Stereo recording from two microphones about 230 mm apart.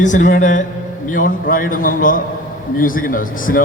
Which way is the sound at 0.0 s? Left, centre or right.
Left.